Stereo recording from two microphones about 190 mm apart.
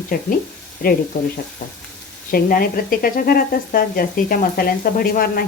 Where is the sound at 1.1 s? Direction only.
45° left (ahead or behind).